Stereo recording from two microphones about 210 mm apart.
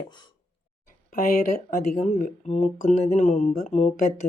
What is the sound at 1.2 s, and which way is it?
Speech, 40° left (ahead or behind).